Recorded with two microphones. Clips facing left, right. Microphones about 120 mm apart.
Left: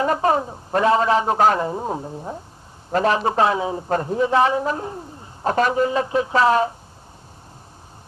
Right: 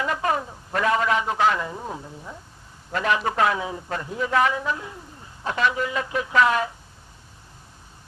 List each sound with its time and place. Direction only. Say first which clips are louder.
0.0 s a man's voice: left 6 dB; 35° left (ahead or behind)